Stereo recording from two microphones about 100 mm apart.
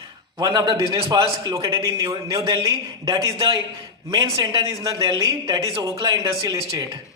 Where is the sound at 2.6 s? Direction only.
35° right (ahead or behind).